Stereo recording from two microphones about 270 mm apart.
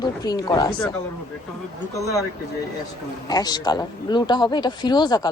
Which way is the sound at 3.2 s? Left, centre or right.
Centre.